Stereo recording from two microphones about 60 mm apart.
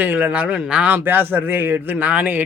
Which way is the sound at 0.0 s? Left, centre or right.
Right.